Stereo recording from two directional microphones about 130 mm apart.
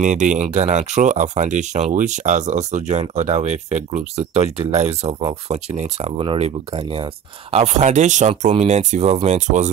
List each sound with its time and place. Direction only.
0.0 s speech: 70° right (ahead or behind); by 7.1 s 40° right (ahead or behind)
7.5 s speech: 55° right (ahead or behind)